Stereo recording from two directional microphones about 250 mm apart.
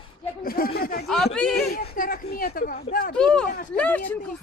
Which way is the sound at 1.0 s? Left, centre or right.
Centre.